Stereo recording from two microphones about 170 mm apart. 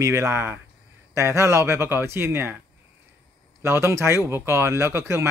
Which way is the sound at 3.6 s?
15° right (ahead or behind).